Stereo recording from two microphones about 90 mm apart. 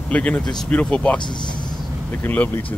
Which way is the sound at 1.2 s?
55° left (ahead or behind).